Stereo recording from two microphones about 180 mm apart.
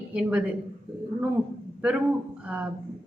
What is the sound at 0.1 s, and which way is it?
Speech, 5° right (ahead or behind).